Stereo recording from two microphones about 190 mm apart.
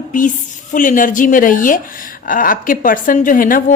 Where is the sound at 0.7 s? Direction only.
45° left (ahead or behind).